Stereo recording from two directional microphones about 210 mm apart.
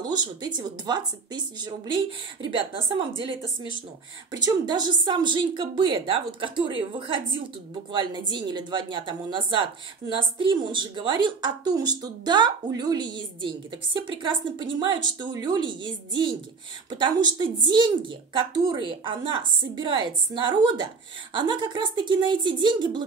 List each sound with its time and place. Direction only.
0.0 s speech: 20° right (ahead or behind)
4.3 s speech: 20° right (ahead or behind)